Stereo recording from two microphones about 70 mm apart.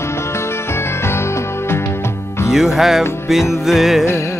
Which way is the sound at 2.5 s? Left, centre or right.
Centre.